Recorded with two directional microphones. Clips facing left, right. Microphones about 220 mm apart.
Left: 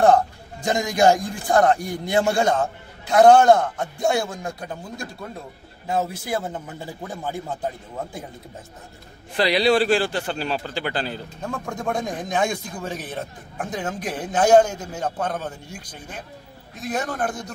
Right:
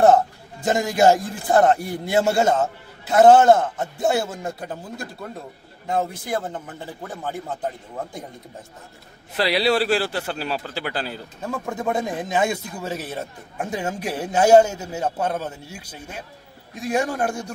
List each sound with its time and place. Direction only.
0.0 s a man's voice: 5° right (ahead or behind); by 7.5 s 10° left (ahead or behind)
9.4 s a man's voice: 5° right (ahead or behind)